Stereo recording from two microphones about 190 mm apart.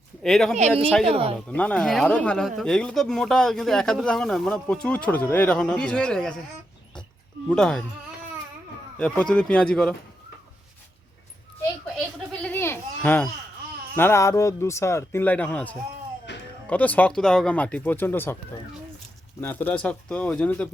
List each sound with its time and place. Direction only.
0.2 s speech: centre (ahead or behind)
1.0 s speech: 30° right (ahead or behind)
1.5 s speech: 5° left (ahead or behind)
7.5 s speech: 5° left (ahead or behind)
9.0 s speech: 10° left (ahead or behind)
12.3 s a sound: 5° left (ahead or behind)
13.9 s speech: 10° left (ahead or behind)
16.3 s music: 65° left (ahead or behind)
16.6 s speech: 10° left (ahead or behind)
19.4 s speech: 10° left (ahead or behind)